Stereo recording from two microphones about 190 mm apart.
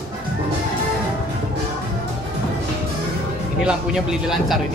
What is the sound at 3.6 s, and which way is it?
Speech, 5° right (ahead or behind).